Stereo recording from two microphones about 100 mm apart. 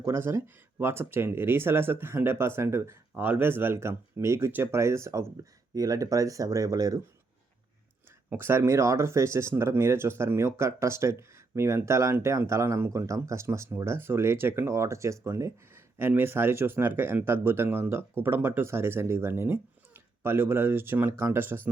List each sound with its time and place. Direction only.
0.0 s speech: 30° right (ahead or behind)
8.3 s speech: 25° right (ahead or behind)